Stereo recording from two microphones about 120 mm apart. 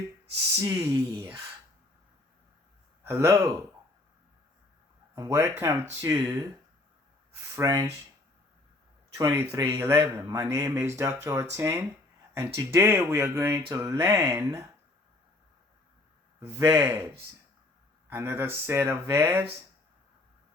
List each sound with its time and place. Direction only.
0.6 s speech: 25° right (ahead or behind)
3.0 s speech: 20° right (ahead or behind)
5.1 s speech: 25° right (ahead or behind)
9.1 s speech: 20° right (ahead or behind)
16.6 s speech: 20° right (ahead or behind)
18.1 s speech: 20° right (ahead or behind)